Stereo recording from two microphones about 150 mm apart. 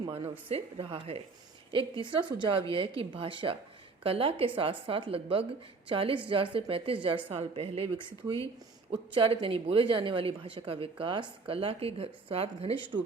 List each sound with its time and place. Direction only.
0.0 s a woman's voice: 40° right (ahead or behind)
9.1 s a woman's voice: 35° right (ahead or behind)